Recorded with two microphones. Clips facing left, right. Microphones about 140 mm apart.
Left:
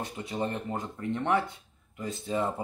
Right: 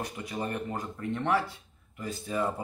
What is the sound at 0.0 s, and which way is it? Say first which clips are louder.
Speech: left 2 dB; 25° left (ahead or behind).